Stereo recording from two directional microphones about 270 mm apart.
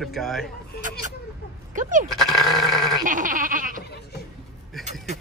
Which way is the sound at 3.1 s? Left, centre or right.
Right.